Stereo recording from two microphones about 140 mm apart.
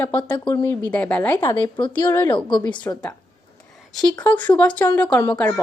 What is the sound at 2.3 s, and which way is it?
Speech, 35° left (ahead or behind).